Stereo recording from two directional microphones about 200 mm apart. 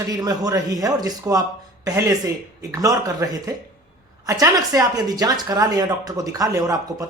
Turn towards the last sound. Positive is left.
turn(degrees=-20)  # may be behind; listen again after turning